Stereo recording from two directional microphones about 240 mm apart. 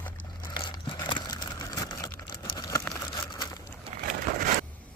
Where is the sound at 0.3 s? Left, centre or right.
Centre.